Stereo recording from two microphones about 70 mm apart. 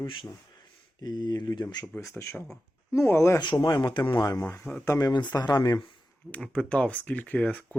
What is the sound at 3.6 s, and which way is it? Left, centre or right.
Speech, left.